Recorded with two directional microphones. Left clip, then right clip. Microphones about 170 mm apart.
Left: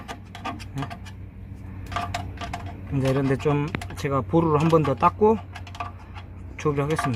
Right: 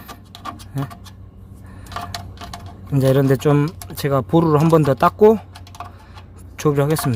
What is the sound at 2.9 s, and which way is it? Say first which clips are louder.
Speech: right 8 dB; 60° right (ahead or behind).